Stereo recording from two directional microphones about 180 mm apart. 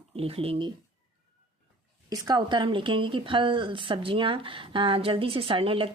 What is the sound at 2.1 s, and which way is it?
A woman's voice, 20° right (ahead or behind).